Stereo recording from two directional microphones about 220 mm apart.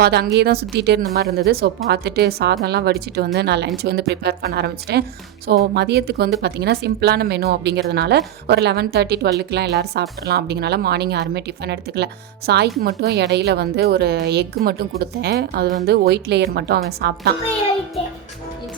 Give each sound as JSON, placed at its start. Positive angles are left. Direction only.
{"t": 0.0, "sound": "a woman's voice", "side_deg": -45}